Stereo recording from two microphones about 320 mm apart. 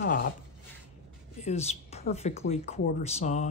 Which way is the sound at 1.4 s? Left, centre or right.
Centre.